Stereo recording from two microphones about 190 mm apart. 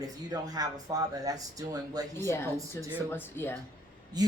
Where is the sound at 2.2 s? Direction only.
15° left (ahead or behind).